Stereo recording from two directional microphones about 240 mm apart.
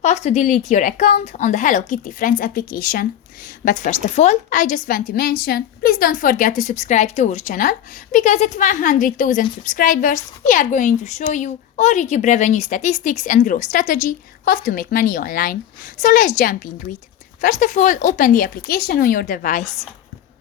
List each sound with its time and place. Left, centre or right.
0.0 s a woman's voice: left